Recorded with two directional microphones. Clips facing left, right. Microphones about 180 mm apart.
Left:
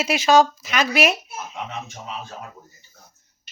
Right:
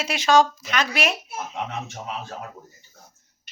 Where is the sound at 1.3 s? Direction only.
60° right (ahead or behind).